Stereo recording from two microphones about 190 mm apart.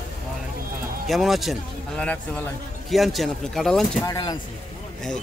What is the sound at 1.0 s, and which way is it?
Speech, centre (ahead or behind).